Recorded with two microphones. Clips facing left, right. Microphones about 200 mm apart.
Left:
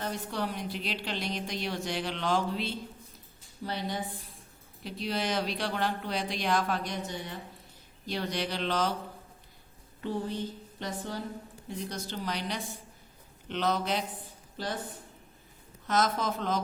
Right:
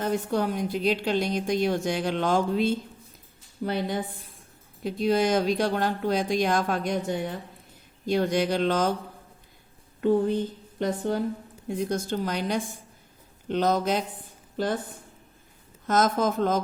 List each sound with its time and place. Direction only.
0.0 s a woman's voice: 50° right (ahead or behind)
10.0 s a sound: 50° right (ahead or behind)
11.7 s a woman's voice: 50° right (ahead or behind)
15.9 s a woman's voice: 45° right (ahead or behind)